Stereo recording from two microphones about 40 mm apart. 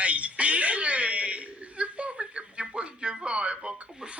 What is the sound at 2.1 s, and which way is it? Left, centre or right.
Music, right.